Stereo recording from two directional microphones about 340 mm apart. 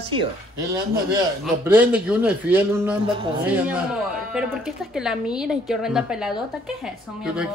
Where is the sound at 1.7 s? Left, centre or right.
Centre.